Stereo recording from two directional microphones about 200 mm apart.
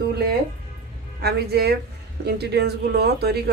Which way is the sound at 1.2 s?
55° right (ahead or behind).